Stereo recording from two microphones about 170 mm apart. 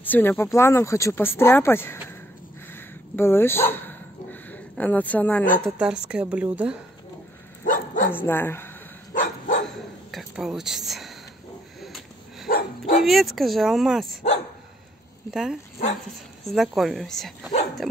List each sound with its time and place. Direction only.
0.0 s speech: 10° left (ahead or behind)
2.7 s dog: 15° left (ahead or behind)
5.6 s a woman's voice: 5° right (ahead or behind)
7.6 s dog: 50° left (ahead or behind)
8.1 s speech: 10° left (ahead or behind)
9.1 s dog: 50° left (ahead or behind)
10.1 s speech: 5° right (ahead or behind)
11.8 s a sound: centre (ahead or behind)
12.4 s dog: 50° left (ahead or behind)
13.0 s speech: centre (ahead or behind)
16.4 s speech: centre (ahead or behind)